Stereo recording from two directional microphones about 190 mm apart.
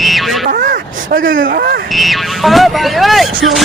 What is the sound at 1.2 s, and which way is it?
Speech, 80° right.